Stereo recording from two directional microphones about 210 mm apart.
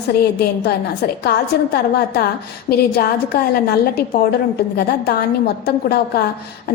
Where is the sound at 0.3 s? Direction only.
50° left (ahead or behind).